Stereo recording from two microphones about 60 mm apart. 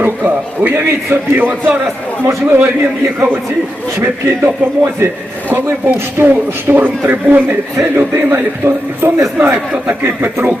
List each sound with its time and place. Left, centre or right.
0.0 s a man's voice: right
4.0 s speech: right
7.9 s speech: right
9.4 s speech: right